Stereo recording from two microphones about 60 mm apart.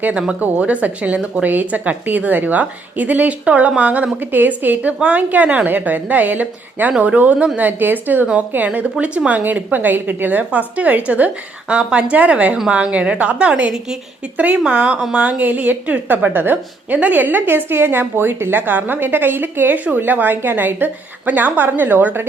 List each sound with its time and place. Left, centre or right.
0.0 s a woman's voice: centre
7.6 s a woman's voice: right